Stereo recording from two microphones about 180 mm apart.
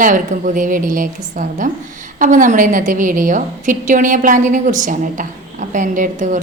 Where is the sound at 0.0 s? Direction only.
45° right (ahead or behind).